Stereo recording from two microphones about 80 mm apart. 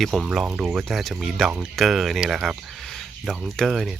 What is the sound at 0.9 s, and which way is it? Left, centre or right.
Speech, centre.